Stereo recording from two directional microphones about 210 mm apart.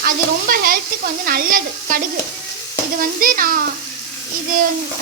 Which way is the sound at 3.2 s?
40° right (ahead or behind).